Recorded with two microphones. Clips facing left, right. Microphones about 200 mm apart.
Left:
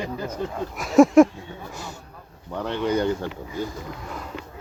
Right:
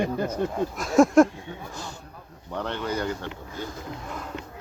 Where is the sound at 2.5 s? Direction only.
10° left (ahead or behind).